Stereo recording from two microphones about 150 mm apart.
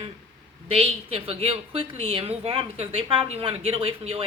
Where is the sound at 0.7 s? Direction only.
40° right (ahead or behind).